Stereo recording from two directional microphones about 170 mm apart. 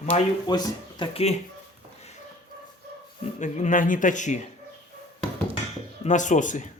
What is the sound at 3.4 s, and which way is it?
Speech, 50° left (ahead or behind).